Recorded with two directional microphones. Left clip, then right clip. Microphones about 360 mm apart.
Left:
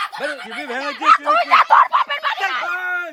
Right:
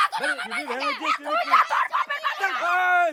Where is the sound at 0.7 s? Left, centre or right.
Left.